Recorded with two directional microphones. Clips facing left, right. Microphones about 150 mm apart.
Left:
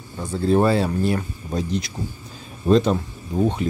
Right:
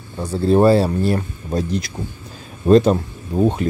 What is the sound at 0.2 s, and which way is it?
Speech, 35° right (ahead or behind).